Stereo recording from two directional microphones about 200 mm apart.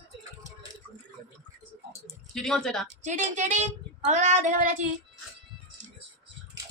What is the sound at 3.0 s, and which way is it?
Child singing, 35° right (ahead or behind).